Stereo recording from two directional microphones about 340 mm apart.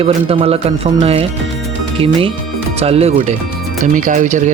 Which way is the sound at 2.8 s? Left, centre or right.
Centre.